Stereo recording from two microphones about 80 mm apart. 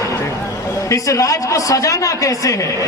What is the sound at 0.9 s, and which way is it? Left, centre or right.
A man's voice, left.